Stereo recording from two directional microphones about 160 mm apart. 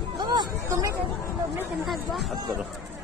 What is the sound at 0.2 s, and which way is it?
Chatter, 25° right (ahead or behind).